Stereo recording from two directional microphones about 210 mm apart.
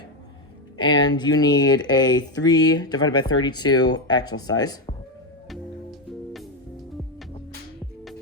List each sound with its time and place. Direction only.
0.8 s speech: 20° left (ahead or behind)
5.5 s music: centre (ahead or behind)